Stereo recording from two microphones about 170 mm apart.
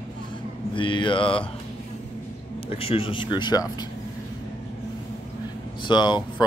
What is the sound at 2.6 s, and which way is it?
A man's voice, 35° left (ahead or behind).